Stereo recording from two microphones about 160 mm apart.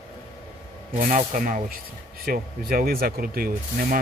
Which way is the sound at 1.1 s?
60° right (ahead or behind).